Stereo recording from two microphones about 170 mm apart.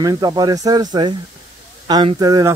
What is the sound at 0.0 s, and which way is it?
Speech, 25° right (ahead or behind).